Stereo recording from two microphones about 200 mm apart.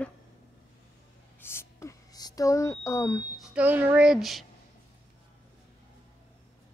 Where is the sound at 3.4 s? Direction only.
5° right (ahead or behind).